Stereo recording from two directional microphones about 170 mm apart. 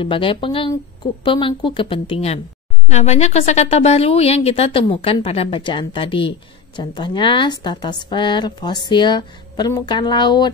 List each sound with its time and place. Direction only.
0.0 s speech: 30° left (ahead or behind)